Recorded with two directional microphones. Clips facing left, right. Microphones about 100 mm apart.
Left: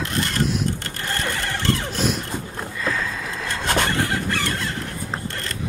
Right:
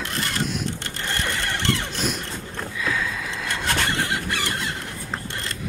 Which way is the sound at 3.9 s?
20° right (ahead or behind).